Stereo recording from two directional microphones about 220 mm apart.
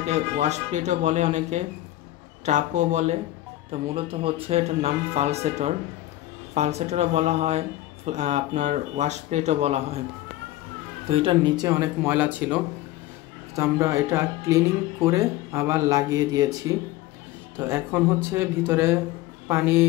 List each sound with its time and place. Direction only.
0.0 s speech: 30° right (ahead or behind)
11.1 s speech: 25° right (ahead or behind); by 12.5 s 5° right (ahead or behind)
13.6 s speech: 15° right (ahead or behind)